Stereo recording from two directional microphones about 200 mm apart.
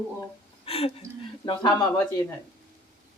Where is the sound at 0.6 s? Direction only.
30° left (ahead or behind).